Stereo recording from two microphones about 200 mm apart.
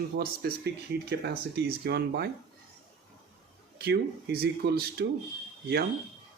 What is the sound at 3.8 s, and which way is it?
Speech, 55° right (ahead or behind).